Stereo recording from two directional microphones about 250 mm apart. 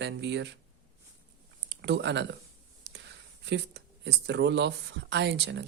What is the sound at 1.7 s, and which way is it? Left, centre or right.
Speech, right.